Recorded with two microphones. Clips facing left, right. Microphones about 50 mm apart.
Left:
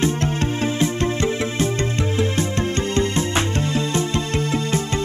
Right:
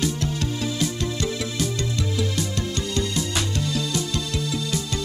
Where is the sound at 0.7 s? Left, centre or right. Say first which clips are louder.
Left 5 dB; left.